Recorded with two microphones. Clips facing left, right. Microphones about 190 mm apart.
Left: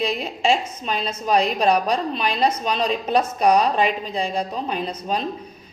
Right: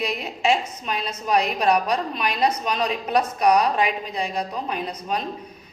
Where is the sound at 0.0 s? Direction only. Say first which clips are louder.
Left 2 dB; 30° left (ahead or behind).